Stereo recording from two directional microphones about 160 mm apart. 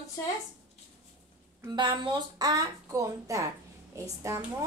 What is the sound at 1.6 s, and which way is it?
A woman's voice, 30° right (ahead or behind).